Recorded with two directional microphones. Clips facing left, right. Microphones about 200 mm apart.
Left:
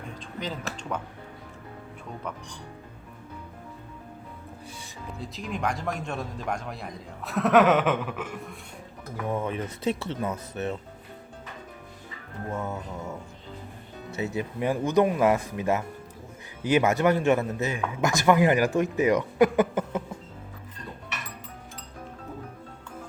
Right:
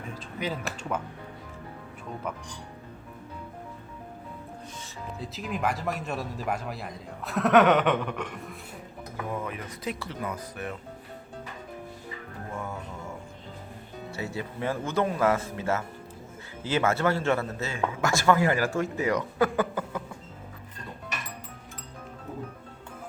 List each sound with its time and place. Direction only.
0.1 s speech: 10° right (ahead or behind)
5.2 s a man's voice: centre (ahead or behind)
9.3 s speech: 25° left (ahead or behind)
12.5 s speech: 20° left (ahead or behind)
14.1 s speech: 20° left (ahead or behind)